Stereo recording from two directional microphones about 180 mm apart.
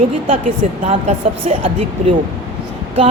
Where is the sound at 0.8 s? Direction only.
35° right (ahead or behind).